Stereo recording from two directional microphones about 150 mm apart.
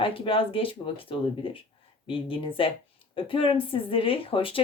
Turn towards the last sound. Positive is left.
turn(degrees=35)  # may be behind; listen again after turning